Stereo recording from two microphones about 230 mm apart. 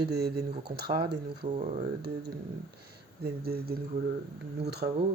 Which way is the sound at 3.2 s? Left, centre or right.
Right.